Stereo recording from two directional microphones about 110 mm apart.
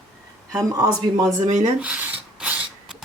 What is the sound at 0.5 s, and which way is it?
Speech, 35° right (ahead or behind).